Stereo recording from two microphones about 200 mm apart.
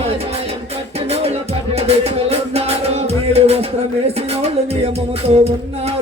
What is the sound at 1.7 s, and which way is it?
Music, 30° right (ahead or behind).